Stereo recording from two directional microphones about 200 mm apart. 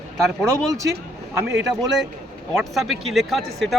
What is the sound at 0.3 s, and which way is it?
Speech, 15° right (ahead or behind).